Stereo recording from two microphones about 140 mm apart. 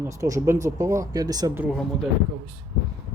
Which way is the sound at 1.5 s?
15° right (ahead or behind).